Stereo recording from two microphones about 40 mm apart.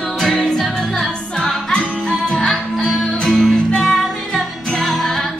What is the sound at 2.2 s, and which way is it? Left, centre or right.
Music, centre.